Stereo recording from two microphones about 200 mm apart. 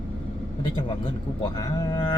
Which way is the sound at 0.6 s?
20° left (ahead or behind).